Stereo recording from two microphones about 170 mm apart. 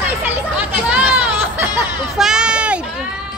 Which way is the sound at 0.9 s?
5° right (ahead or behind).